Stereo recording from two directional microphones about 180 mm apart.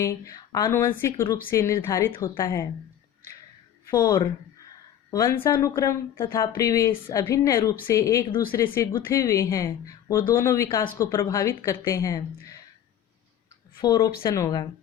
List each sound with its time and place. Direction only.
0.0 s speech: 15° left (ahead or behind)
3.8 s speech: 15° left (ahead or behind)
13.8 s speech: 20° left (ahead or behind)